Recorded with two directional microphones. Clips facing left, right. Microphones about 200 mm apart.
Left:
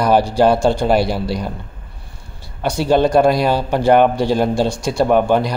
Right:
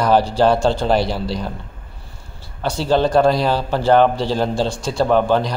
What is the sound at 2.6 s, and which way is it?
Speech, 15° left (ahead or behind).